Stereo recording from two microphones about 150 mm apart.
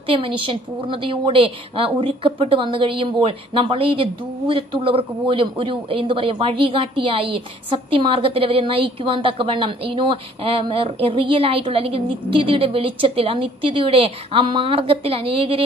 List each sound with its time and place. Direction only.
0.0 s a woman's voice: 35° right (ahead or behind)